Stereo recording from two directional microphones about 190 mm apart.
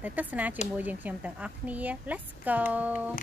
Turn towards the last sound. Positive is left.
turn(degrees=-10)  # may be behind; listen again after turning